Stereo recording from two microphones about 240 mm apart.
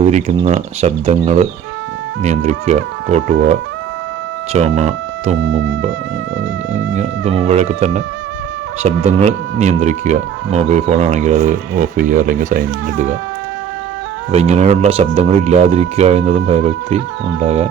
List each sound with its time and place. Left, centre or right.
0.0 s speech: right
6.9 s speech: right
14.3 s speech: right